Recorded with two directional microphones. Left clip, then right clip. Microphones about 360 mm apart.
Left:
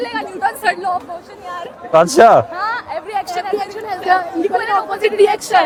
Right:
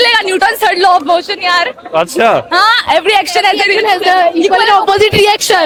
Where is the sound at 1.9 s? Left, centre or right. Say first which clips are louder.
Left 3 dB; centre.